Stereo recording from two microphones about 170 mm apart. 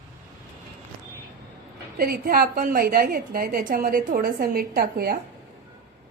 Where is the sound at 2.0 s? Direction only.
65° right (ahead or behind).